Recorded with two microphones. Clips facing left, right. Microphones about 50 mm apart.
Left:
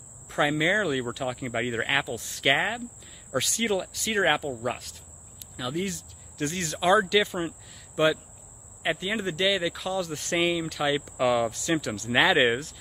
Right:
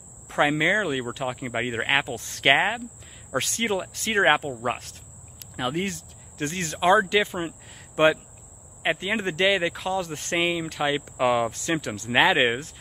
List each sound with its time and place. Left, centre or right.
0.3 s speech: right
7.6 s a sound: right
8.8 s speech: right